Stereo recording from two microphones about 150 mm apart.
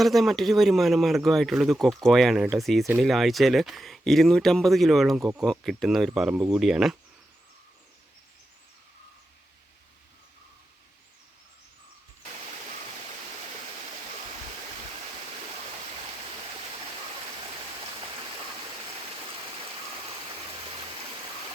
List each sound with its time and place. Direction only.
0.0 s speech: centre (ahead or behind)